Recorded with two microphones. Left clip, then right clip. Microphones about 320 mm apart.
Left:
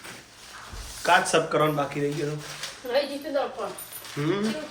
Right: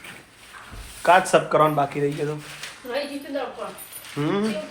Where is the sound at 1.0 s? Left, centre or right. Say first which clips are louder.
Right 4 dB; centre.